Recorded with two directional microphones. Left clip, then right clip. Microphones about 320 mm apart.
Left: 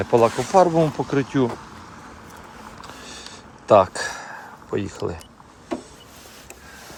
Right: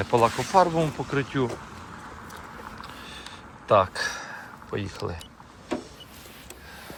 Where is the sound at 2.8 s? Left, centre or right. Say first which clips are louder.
Left 2 dB; left.